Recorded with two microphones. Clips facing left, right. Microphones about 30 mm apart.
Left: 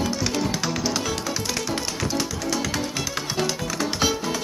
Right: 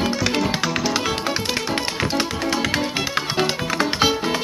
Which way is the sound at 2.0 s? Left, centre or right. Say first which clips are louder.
Right 4 dB; right.